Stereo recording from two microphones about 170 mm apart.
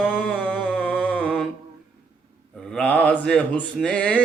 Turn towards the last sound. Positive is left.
turn(degrees=5)  # may be behind; listen again after turning